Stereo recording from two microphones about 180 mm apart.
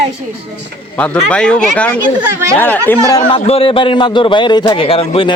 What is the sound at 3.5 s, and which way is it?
A man's voice, 30° left (ahead or behind).